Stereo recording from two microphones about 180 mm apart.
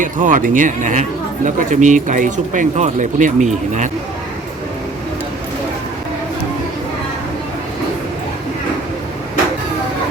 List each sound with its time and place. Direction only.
0.0 s speech: 45° right (ahead or behind)